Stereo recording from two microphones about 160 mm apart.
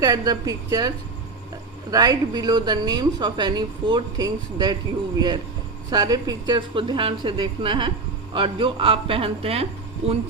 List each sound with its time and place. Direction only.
0.0 s a woman's voice: 25° right (ahead or behind)